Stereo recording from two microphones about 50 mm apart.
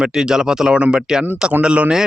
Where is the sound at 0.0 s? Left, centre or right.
Centre.